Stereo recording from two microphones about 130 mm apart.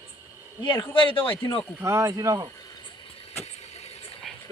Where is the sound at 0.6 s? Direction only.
40° left (ahead or behind).